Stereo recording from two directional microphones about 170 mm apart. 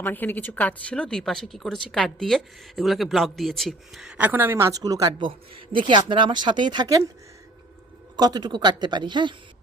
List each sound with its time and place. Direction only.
0.0 s speech: 10° left (ahead or behind); by 7.0 s 20° right (ahead or behind)
8.1 s speech: 25° right (ahead or behind)